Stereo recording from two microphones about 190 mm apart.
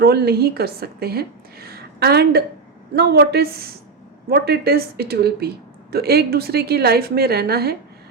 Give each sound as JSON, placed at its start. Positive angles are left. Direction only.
{"t": 0.0, "sound": "a woman's voice", "side_deg": -60}